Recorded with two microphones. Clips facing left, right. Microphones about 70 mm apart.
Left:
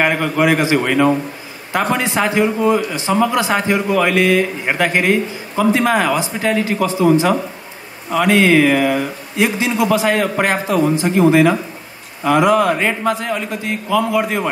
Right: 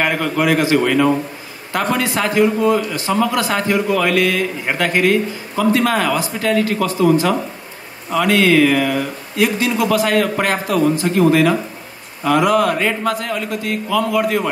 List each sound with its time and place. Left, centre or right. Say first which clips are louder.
0.0 s a man's voice: left 2 dB; left